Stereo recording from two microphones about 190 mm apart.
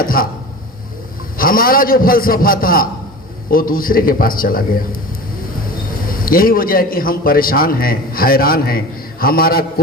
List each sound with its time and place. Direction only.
0.0 s chopping: 50° left (ahead or behind)
1.4 s a man's voice: 50° left (ahead or behind)
6.1 s a man's voice: 50° left (ahead or behind)